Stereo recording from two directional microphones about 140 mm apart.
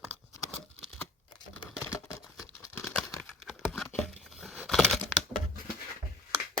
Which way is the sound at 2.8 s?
5° left (ahead or behind).